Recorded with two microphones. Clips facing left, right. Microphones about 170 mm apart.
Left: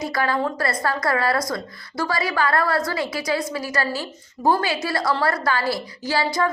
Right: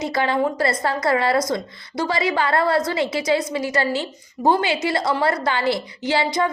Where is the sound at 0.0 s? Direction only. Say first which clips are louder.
Right 2 dB; 25° right (ahead or behind).